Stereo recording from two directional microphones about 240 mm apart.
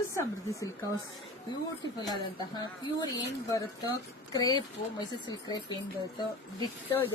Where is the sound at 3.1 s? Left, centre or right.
Centre.